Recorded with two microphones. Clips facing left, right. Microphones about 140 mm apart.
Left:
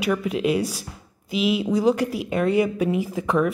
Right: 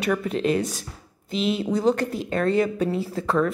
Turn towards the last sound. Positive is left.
turn(degrees=15)  # may be behind; listen again after turning